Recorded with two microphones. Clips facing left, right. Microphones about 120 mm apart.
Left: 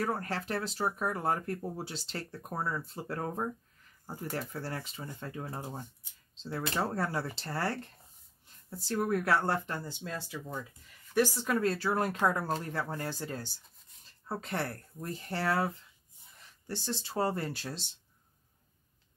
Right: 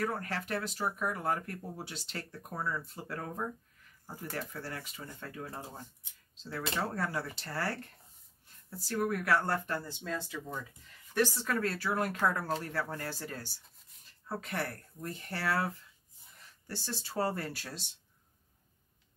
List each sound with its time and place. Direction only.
0.0 s speech: 30° left (ahead or behind)